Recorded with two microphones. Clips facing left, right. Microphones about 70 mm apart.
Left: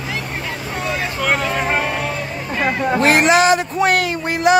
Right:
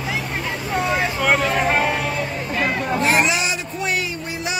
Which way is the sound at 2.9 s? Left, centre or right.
Left.